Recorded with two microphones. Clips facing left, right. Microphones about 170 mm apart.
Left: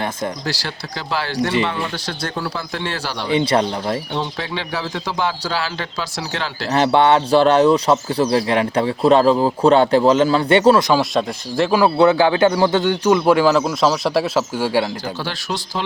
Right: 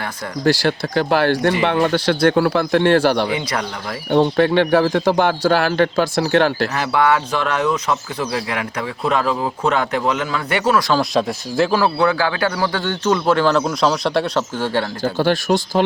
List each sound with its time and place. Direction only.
0.4 s speech: 55° right (ahead or behind)
3.2 s speech: 30° left (ahead or behind)
4.1 s speech: 55° right (ahead or behind)
6.7 s speech: 30° left (ahead or behind)
10.9 s speech: centre (ahead or behind)
11.7 s speech: 15° left (ahead or behind)
15.2 s speech: 50° right (ahead or behind)